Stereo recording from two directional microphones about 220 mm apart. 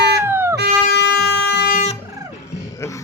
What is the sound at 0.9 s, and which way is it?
Air horn, 50° left (ahead or behind).